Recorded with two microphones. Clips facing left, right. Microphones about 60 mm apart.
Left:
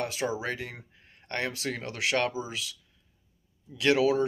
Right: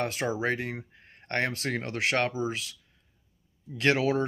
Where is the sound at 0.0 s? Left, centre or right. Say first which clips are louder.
Right 2 dB; right.